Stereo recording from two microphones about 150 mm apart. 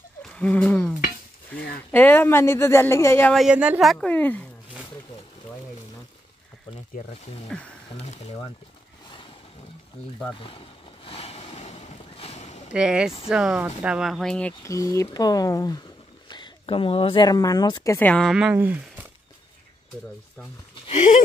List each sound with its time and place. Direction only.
0.4 s speech: 10° left (ahead or behind)
3.3 s speech: 5° right (ahead or behind)
4.1 s speech: 10° left (ahead or behind)
11.1 s a sound: 40° left (ahead or behind)
12.7 s speech: 5° right (ahead or behind)
14.7 s speech: 20° left (ahead or behind)
17.9 s speech: 10° left (ahead or behind)
18.3 s speech: 10° right (ahead or behind)
20.8 s a sound: 50° left (ahead or behind)